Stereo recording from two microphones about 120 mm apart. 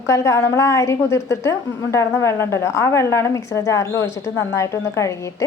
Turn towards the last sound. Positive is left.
turn(degrees=25)  # may be behind; listen again after turning